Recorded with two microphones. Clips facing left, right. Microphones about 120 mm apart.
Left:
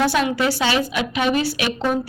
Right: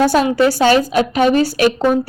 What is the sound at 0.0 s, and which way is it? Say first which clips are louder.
A woman's voice: right 6 dB; 40° right (ahead or behind).